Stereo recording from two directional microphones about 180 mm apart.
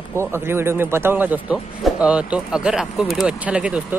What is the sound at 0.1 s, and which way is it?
Speech, 15° right (ahead or behind).